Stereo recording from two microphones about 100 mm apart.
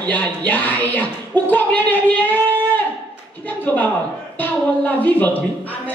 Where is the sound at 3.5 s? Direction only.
15° left (ahead or behind).